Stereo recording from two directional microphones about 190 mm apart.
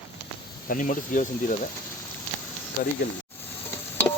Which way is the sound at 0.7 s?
40° left (ahead or behind).